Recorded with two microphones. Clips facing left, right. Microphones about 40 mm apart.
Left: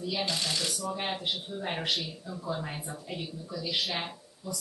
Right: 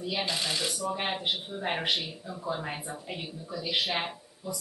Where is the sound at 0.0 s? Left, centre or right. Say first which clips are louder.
Right 1 dB; centre.